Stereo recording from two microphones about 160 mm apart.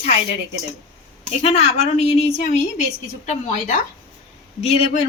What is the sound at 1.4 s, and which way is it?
A woman's voice, 40° left (ahead or behind).